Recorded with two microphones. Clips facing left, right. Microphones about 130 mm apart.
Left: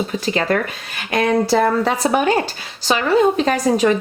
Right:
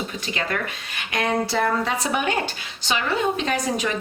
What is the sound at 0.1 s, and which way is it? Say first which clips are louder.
Speech: left 9 dB; 40° left (ahead or behind).